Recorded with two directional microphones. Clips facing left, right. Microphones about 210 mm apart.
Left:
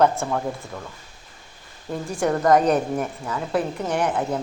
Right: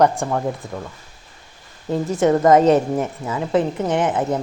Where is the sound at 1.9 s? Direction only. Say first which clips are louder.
Right 6 dB; 20° right (ahead or behind).